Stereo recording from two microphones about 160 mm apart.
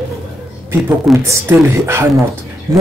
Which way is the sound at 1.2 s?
15° right (ahead or behind).